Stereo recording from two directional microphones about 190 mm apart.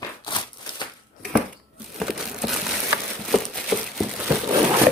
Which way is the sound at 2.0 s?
Centre (ahead or behind).